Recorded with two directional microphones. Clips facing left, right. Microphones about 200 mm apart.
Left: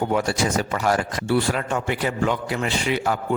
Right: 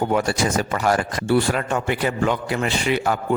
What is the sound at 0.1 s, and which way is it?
Speech, 50° right (ahead or behind).